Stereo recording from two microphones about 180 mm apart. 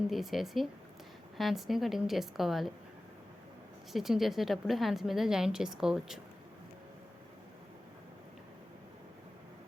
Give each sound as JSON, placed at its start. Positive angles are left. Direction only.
{"t": 0.1, "sound": "a woman's voice", "side_deg": 0}
{"t": 3.9, "sound": "a woman's voice", "side_deg": 0}